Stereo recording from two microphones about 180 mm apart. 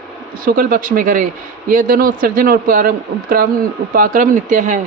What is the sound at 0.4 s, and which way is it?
A man's voice, 50° right (ahead or behind).